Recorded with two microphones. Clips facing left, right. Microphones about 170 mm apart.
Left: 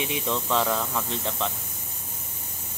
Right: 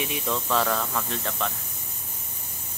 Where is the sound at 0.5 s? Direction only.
15° left (ahead or behind).